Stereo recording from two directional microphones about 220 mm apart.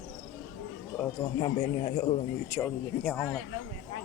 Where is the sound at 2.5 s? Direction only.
5° left (ahead or behind).